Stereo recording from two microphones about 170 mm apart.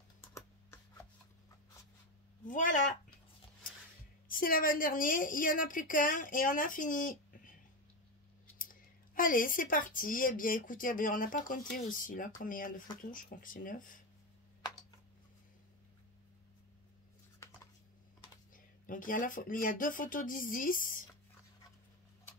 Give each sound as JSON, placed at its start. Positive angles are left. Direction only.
{"t": 0.3, "sound": "computer keyboard", "side_deg": 15}
{"t": 2.4, "sound": "a woman's voice", "side_deg": 50}
{"t": 4.3, "sound": "a woman's voice", "side_deg": 55}
{"t": 8.5, "sound": "a woman's voice", "side_deg": 55}
{"t": 18.5, "sound": "a woman's voice", "side_deg": 55}